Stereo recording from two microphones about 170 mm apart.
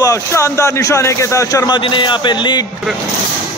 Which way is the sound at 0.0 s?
20° left (ahead or behind).